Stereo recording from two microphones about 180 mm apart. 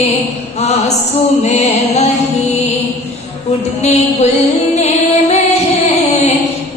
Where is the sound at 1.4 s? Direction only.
35° left (ahead or behind).